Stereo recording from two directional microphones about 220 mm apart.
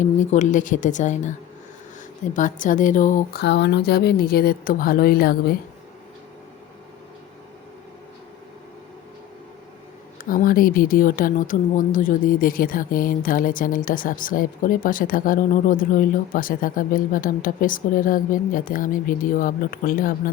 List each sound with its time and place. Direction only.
0.0 s speech: 35° left (ahead or behind)
2.3 s speech: 35° left (ahead or behind)
3.4 s a woman's voice: 50° left (ahead or behind)
10.2 s speech: 40° left (ahead or behind)